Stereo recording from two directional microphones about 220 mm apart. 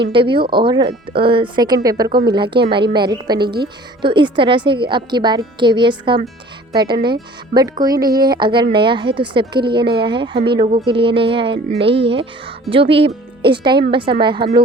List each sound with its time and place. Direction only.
0.1 s speech: 20° right (ahead or behind)
8.0 s speech: 40° right (ahead or behind)
8.3 s speech: 20° right (ahead or behind)